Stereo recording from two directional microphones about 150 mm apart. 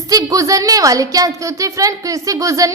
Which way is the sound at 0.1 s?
20° right (ahead or behind).